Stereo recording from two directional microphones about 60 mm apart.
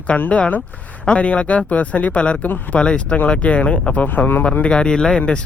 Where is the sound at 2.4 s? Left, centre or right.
Left.